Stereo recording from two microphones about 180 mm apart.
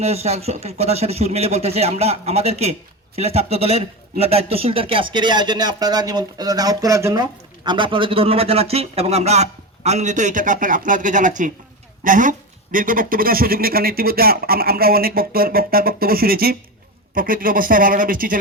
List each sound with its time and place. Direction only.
0.0 s speech: 35° right (ahead or behind)